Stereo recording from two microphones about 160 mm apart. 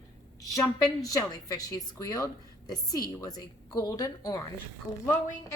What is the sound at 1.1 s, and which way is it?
A woman's voice, 20° left (ahead or behind).